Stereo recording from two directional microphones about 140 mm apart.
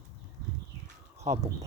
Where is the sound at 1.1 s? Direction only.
55° right (ahead or behind).